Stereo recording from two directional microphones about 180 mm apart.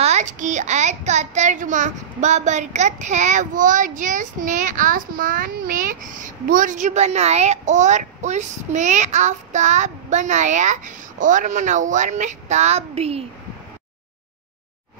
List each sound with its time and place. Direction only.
0.0 s a child's voice: 40° right (ahead or behind)